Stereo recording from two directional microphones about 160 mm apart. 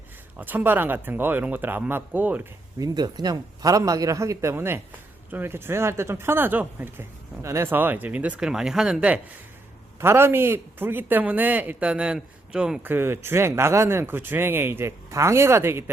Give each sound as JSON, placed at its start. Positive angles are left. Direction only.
{"t": 0.3, "sound": "a man's voice", "side_deg": -10}
{"t": 2.7, "sound": "a man's voice", "side_deg": -25}